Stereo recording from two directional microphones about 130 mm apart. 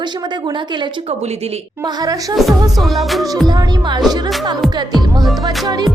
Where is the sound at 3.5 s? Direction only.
30° right (ahead or behind).